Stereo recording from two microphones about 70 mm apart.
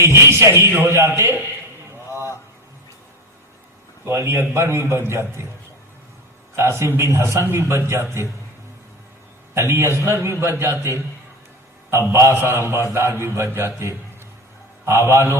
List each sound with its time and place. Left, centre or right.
0.0 s speech: right
2.0 s a sound: right
4.0 s speech: right
6.6 s a man's voice: right
9.6 s a man's voice: right
12.1 s a man's voice: right